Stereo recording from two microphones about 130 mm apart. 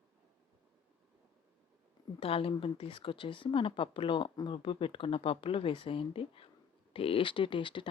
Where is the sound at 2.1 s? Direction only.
45° left (ahead or behind).